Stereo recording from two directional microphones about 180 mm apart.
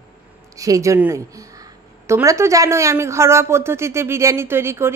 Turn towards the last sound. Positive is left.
turn(degrees=-15)  # may be behind; listen again after turning